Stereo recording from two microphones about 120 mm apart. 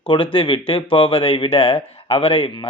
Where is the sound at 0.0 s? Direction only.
50° left (ahead or behind).